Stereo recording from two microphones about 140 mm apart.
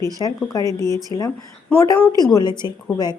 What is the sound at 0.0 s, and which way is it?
A woman's voice, 25° left (ahead or behind).